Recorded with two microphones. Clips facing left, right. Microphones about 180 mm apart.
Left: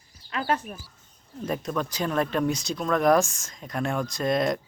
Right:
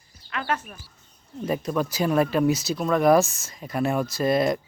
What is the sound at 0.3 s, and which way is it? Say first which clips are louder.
Speech: left 1 dB; 35° left (ahead or behind).